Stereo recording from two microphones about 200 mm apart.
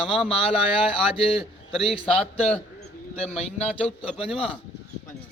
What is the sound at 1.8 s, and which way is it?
Speech, 25° left (ahead or behind).